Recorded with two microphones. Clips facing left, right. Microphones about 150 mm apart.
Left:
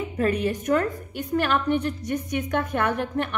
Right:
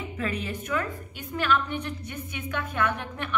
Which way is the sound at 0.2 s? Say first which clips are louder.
Left 8 dB; 50° left (ahead or behind).